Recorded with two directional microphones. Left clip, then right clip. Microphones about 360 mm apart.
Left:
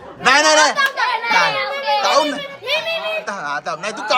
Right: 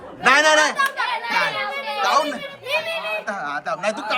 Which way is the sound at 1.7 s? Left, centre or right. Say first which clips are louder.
Left 8 dB; left.